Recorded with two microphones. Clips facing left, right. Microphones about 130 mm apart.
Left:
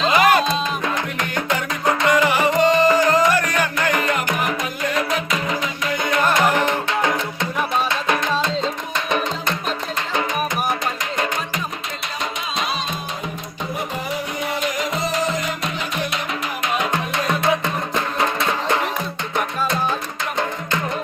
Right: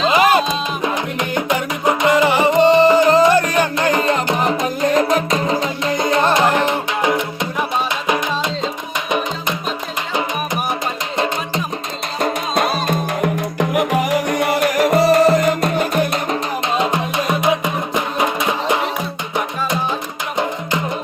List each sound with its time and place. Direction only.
0.1 s music: 20° right (ahead or behind)
12.2 s music: 55° right (ahead or behind)
16.7 s music: 20° right (ahead or behind)
20.4 s music: 20° right (ahead or behind)